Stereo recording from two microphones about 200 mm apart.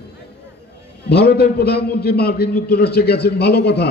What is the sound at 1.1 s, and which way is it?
A man's voice, 55° left (ahead or behind).